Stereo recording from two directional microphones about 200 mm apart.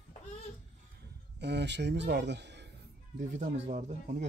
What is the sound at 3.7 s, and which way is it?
Speech, 35° right (ahead or behind).